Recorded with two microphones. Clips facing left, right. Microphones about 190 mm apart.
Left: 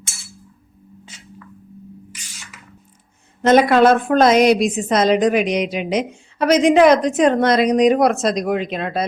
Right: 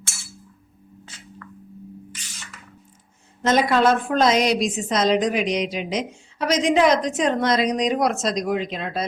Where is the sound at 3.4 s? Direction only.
60° left (ahead or behind).